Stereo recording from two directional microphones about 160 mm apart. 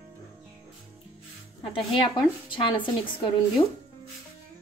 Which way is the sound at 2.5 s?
30° left (ahead or behind).